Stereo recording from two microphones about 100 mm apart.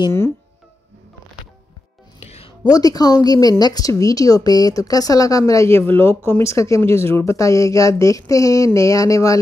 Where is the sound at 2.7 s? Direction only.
40° left (ahead or behind).